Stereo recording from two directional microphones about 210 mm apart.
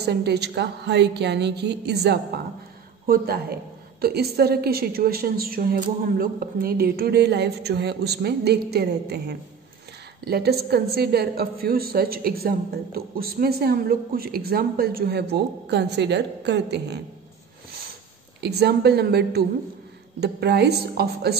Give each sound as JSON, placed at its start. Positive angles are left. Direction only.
{"t": 0.0, "sound": "a woman's voice", "side_deg": -50}
{"t": 18.4, "sound": "a woman's voice", "side_deg": -50}